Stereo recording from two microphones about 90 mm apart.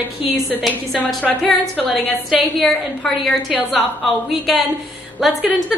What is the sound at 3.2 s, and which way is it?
Speech, centre (ahead or behind).